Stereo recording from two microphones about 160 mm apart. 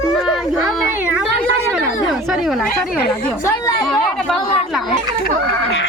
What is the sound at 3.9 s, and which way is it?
Speech, 5° left (ahead or behind).